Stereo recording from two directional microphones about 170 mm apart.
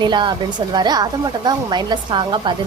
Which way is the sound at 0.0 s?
25° right (ahead or behind).